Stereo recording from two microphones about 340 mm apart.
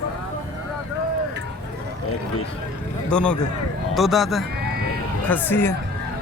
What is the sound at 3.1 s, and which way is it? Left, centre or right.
Speech, centre.